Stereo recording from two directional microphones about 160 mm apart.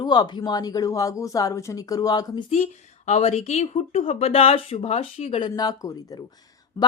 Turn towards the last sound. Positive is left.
turn(degrees=25)  # may be behind; listen again after turning